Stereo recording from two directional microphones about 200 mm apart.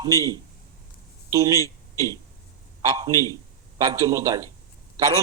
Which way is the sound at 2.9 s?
15° right (ahead or behind).